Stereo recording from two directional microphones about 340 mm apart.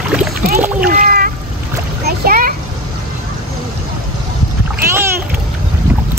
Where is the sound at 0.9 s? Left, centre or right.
Right.